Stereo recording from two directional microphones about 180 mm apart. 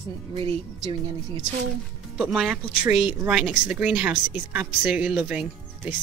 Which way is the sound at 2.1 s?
Centre (ahead or behind).